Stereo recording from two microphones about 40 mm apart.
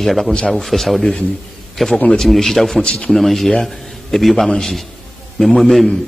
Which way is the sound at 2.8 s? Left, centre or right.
Left.